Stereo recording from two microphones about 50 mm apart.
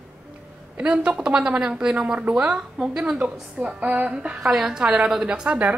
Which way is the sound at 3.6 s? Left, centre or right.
Right.